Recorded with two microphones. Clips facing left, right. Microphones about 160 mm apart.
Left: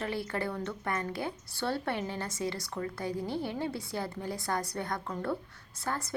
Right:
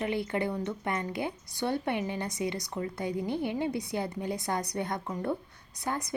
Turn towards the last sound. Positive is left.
turn(degrees=-15)  # may be behind; listen again after turning